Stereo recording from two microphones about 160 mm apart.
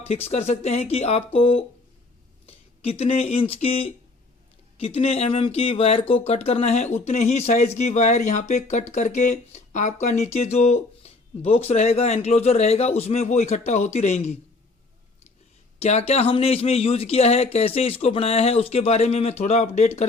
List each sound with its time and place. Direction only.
0.3 s speech: 45° left (ahead or behind)
4.9 s speech: 40° left (ahead or behind)
15.8 s speech: 40° left (ahead or behind)